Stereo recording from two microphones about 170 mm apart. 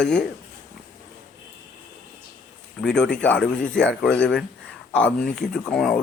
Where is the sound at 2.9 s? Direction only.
5° left (ahead or behind).